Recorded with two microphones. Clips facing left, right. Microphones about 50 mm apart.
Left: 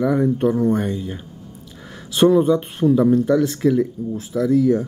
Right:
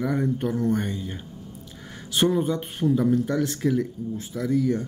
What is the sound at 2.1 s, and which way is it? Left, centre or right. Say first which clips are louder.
Speech: left 8 dB; centre.